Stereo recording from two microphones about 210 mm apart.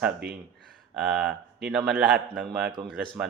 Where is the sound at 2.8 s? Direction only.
20° right (ahead or behind).